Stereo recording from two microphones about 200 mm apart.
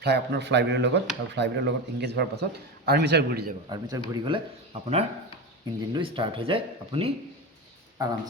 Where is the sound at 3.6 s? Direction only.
20° right (ahead or behind).